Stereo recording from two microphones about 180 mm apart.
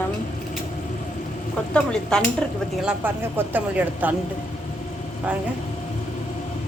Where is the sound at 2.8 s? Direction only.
10° right (ahead or behind).